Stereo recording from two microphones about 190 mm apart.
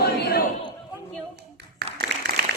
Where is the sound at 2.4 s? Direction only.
55° right (ahead or behind).